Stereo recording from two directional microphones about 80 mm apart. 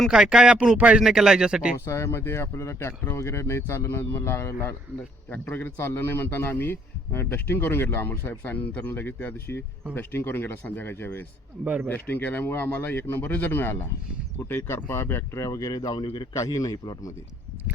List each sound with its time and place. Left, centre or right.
0.1 s speech: centre
1.8 s a man's voice: left
16.5 s a man's voice: left